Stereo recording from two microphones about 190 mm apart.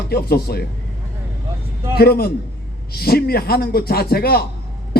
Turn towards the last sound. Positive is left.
turn(degrees=55)  # may be behind; listen again after turning